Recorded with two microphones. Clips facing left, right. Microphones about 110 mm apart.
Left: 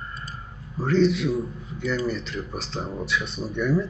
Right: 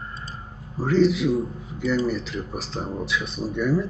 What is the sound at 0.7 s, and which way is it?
Speech, centre (ahead or behind).